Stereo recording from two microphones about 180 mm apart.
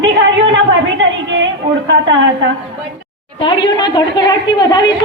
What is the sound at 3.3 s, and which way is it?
Speech, 25° left (ahead or behind).